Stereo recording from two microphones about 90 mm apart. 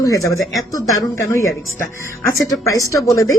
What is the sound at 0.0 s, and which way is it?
Speech, 40° left (ahead or behind).